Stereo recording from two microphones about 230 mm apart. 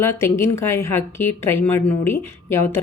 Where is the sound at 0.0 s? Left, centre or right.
Centre.